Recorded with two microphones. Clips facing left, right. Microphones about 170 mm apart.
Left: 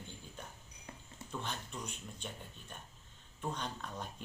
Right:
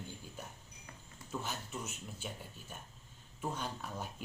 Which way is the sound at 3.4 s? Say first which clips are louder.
Right 1 dB; 5° right (ahead or behind).